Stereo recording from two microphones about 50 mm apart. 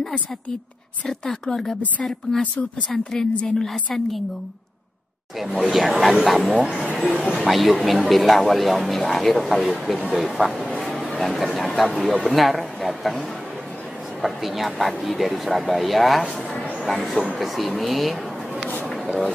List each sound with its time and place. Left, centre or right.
1.0 s a woman's voice: centre
5.4 s speech: centre
14.2 s speech: centre